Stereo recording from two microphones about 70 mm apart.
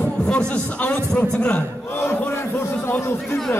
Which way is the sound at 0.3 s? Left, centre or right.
Centre.